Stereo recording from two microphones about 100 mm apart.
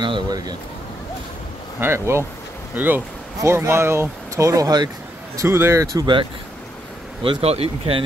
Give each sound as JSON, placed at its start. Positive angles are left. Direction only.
{"t": 0.0, "sound": "speech", "side_deg": -45}
{"t": 1.8, "sound": "speech", "side_deg": -25}
{"t": 5.4, "sound": "speech", "side_deg": -25}
{"t": 7.4, "sound": "speech", "side_deg": -85}